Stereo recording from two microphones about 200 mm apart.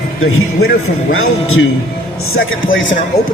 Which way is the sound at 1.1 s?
90° left.